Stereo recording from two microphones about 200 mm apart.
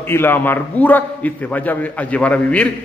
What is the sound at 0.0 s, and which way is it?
A man's voice, 10° left (ahead or behind).